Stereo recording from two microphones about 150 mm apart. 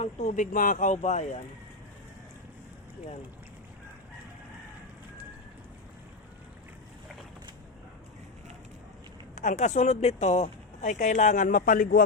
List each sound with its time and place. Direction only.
0.0 s speech: 55° left (ahead or behind)
9.3 s a man's voice: 55° left (ahead or behind)